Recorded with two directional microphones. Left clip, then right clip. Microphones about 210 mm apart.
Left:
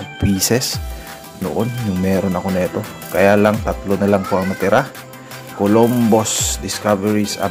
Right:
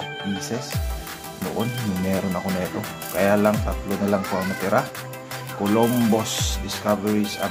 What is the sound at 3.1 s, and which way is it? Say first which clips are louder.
Speech: left 7 dB; 25° left (ahead or behind).